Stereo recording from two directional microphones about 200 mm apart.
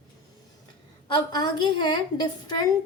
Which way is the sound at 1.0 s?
20° left (ahead or behind).